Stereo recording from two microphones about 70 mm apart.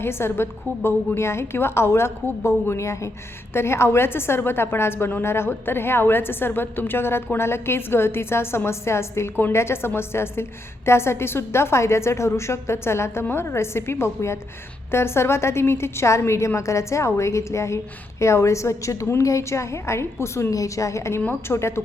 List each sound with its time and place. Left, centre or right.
0.0 s a woman's voice: left